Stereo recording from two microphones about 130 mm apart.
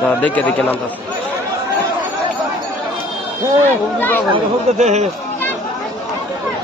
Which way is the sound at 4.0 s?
15° left (ahead or behind).